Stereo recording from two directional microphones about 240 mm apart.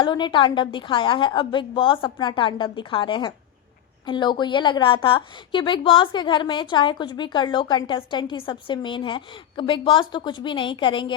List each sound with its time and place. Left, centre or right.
0.0 s a woman's voice: centre